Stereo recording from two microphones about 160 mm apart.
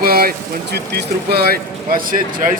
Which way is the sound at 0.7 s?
85° right.